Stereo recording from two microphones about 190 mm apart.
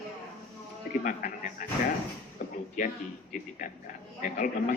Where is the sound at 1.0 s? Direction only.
45° left (ahead or behind).